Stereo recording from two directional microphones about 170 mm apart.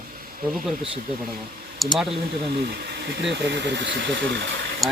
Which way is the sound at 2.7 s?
70° right (ahead or behind).